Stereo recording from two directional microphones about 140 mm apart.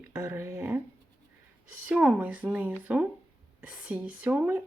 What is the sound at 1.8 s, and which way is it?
Speech, 10° right (ahead or behind).